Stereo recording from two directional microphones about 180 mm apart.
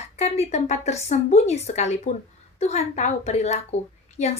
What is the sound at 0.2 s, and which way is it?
A woman's voice, 35° left (ahead or behind).